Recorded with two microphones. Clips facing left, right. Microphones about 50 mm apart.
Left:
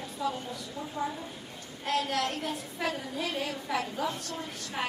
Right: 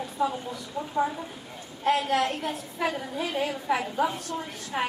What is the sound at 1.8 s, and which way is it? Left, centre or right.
Speech, right.